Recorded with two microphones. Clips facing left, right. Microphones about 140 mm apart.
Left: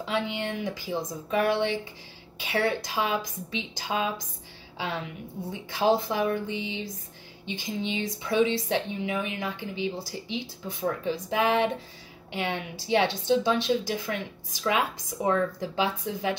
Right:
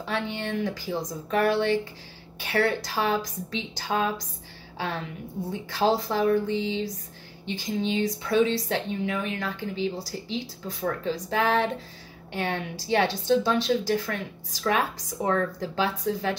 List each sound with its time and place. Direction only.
0.0 s a woman's voice: 15° left (ahead or behind)